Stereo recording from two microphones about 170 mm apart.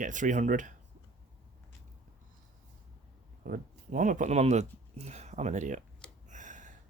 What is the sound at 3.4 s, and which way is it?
Speech, 55° right (ahead or behind).